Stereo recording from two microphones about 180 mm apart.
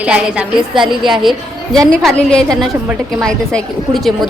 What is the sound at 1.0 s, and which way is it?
A woman's voice, centre (ahead or behind).